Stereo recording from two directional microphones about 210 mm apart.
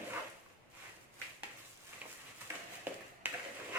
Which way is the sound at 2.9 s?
10° right (ahead or behind).